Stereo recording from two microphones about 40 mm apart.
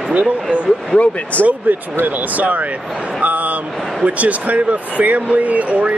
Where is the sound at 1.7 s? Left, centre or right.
Right.